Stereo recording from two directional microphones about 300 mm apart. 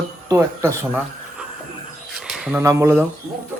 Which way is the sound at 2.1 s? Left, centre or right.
Centre.